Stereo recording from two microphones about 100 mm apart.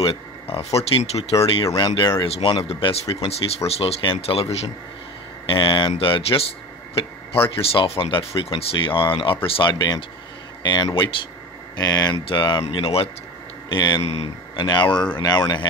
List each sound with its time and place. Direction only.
0.0 s speech: 70° left (ahead or behind)
2.7 s speech: 80° left
5.5 s speech: 60° left (ahead or behind)
12.7 s speech: 70° left (ahead or behind)
13.7 s speech: 50° left (ahead or behind)
14.0 s a man's voice: 90° left
14.5 s speech: 50° left (ahead or behind)